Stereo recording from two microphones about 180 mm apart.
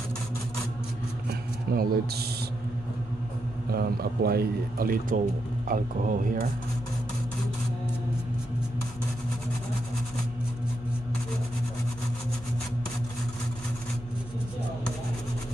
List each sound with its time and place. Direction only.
1.7 s a man's voice: 60° right (ahead or behind)
3.7 s a man's voice: 60° right (ahead or behind)